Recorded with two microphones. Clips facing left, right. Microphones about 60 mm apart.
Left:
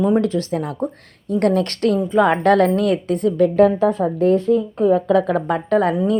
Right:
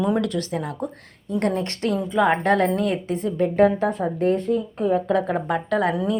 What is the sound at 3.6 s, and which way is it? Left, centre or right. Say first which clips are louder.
Speech: left 4 dB; left.